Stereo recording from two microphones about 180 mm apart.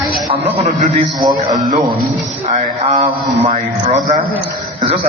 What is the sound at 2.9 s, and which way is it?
A man's voice, 35° right (ahead or behind).